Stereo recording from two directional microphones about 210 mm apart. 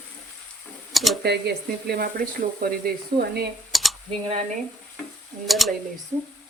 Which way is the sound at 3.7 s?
Centre (ahead or behind).